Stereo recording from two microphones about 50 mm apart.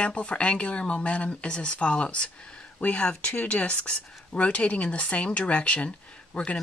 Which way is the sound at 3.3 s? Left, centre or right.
Left.